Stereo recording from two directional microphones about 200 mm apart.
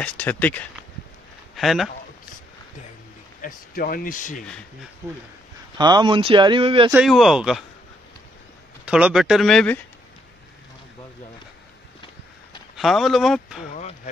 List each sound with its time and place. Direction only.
0.0 s speech: 10° left (ahead or behind)
3.3 s speech: 45° left (ahead or behind)
5.8 s speech: 20° right (ahead or behind)
6.9 s speech: 5° right (ahead or behind)
8.8 s speech: 5° right (ahead or behind)
12.7 s speech: centre (ahead or behind)
13.7 s a sound: 35° left (ahead or behind)